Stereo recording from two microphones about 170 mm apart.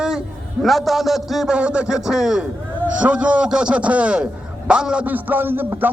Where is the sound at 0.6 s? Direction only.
Centre (ahead or behind).